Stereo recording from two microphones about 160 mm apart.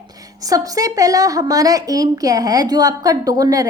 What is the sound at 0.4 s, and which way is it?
Speech, 20° right (ahead or behind).